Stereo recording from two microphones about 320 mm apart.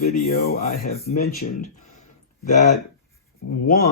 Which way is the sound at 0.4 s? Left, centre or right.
Left.